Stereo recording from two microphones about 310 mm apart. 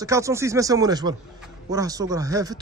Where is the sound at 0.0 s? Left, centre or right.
Centre.